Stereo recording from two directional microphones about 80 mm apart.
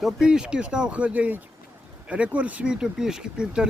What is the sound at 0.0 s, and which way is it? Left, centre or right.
Speech, centre.